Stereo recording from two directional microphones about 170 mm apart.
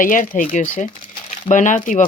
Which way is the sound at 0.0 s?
50° left (ahead or behind).